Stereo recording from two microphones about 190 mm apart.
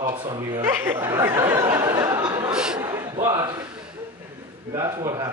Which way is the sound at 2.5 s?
5° right (ahead or behind).